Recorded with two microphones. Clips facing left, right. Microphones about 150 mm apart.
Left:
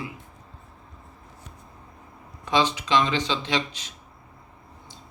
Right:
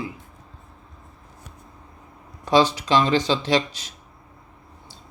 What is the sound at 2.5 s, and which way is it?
Speech, 40° right (ahead or behind).